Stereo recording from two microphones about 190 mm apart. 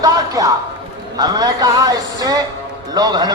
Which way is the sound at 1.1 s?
20° right (ahead or behind).